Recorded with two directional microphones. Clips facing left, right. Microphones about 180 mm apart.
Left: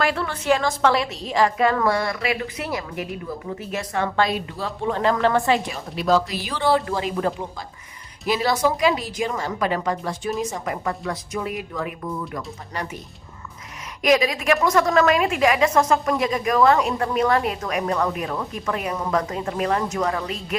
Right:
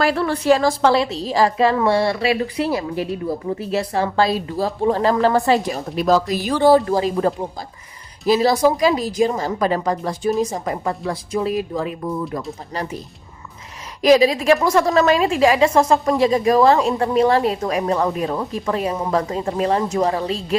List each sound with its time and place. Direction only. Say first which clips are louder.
0.0 s a woman's voice: right 5 dB; 35° right (ahead or behind)
14.0 s a woman's voice: right 6 dB; 30° right (ahead or behind)